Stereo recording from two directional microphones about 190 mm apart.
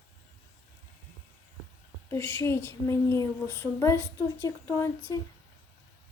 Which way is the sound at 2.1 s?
15° left (ahead or behind).